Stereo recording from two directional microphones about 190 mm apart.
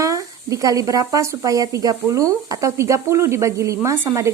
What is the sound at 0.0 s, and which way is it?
Speech, 15° right (ahead or behind).